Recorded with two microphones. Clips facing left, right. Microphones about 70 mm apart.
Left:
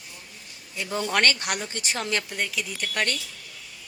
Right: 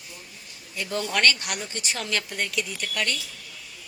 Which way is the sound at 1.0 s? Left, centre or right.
Left.